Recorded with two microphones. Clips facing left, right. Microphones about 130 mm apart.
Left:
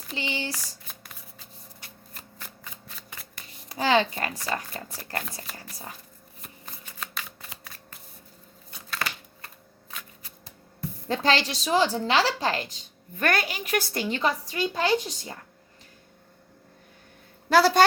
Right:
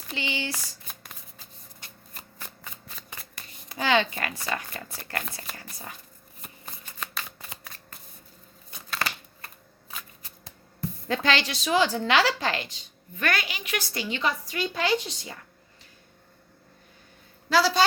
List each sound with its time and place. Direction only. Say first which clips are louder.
0.2 s a woman's voice: even; 35° left (ahead or behind)
0.9 s shuffling cards: even; centre (ahead or behind)
3.7 s a child's voice: left 2 dB; 35° left (ahead or behind)
7.0 s shuffling cards: right 1 dB; centre (ahead or behind)
11.1 s a woman's voice: left 2 dB; 35° left (ahead or behind)
17.5 s a woman's voice: left 3 dB; 50° left (ahead or behind)